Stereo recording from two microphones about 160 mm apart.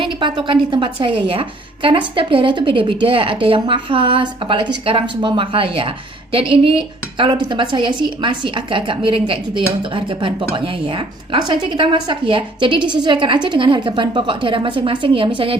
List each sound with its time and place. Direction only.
0.0 s a woman's voice: 30° right (ahead or behind)